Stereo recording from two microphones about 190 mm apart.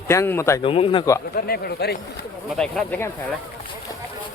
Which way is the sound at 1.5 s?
55° left (ahead or behind).